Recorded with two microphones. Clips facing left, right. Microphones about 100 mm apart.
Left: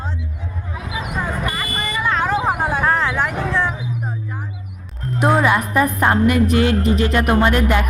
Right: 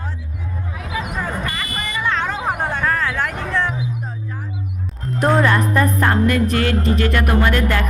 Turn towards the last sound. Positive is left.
turn(degrees=20)  # may be behind; listen again after turning